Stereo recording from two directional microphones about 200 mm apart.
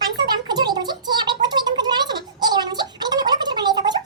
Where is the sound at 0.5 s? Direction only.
20° right (ahead or behind).